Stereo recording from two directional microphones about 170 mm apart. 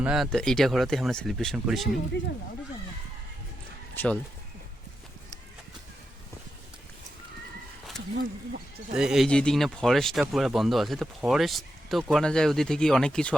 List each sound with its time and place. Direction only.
0.0 s speech: 5° right (ahead or behind)
2.1 s speech: 90° left
3.9 s speech: 10° left (ahead or behind)
7.9 s speech: centre (ahead or behind)